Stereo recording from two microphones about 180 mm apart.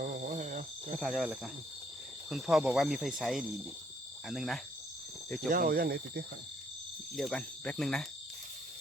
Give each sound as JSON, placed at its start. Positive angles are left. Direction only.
{"t": 0.0, "sound": "cricket", "side_deg": -50}
{"t": 0.9, "sound": "speech", "side_deg": 0}
{"t": 5.5, "sound": "speech", "side_deg": -50}
{"t": 7.2, "sound": "speech", "side_deg": 5}